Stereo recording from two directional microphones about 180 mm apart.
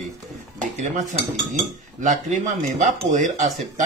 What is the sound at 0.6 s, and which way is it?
Cutlery, 40° right (ahead or behind).